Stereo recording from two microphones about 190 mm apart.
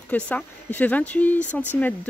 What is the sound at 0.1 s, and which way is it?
Speech, 10° left (ahead or behind).